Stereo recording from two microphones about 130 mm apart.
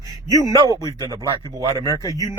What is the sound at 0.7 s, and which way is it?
Speech, 30° right (ahead or behind).